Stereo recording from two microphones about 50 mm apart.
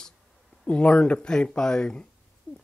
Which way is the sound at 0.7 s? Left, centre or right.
Left.